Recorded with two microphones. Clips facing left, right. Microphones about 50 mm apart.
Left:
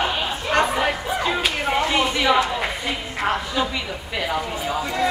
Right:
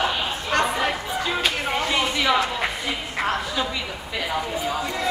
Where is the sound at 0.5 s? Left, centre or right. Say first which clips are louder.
Left 2 dB; centre.